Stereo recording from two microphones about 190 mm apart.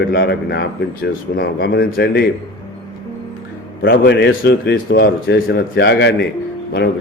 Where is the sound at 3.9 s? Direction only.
60° left (ahead or behind).